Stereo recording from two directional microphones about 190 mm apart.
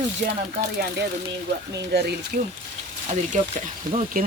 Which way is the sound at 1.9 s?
60° right (ahead or behind).